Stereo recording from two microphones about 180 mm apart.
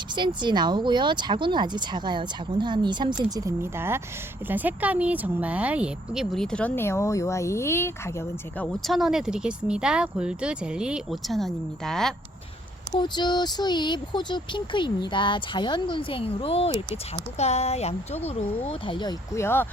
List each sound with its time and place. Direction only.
0.2 s speech: 25° right (ahead or behind); by 8.1 s 15° left (ahead or behind)
8.5 s speech: 5° left (ahead or behind)
12.9 s speech: 25° left (ahead or behind)